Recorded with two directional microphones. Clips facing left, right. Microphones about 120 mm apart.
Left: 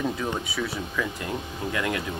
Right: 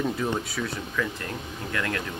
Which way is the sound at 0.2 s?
Centre (ahead or behind).